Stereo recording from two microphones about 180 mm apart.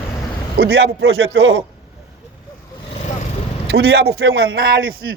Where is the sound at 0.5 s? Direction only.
65° right (ahead or behind).